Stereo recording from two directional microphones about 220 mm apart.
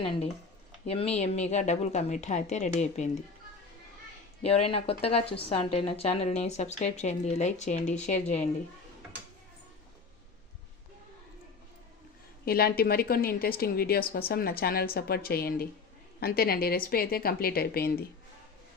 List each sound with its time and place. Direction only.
0.9 s a woman's voice: 30° left (ahead or behind)
4.4 s a woman's voice: 25° left (ahead or behind)
12.5 s a woman's voice: 45° left (ahead or behind)